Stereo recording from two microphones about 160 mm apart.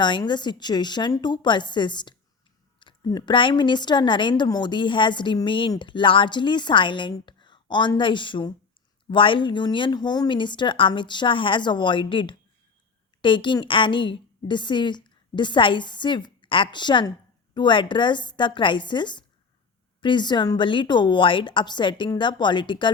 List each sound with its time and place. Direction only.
0.0 s a woman's voice: 30° left (ahead or behind)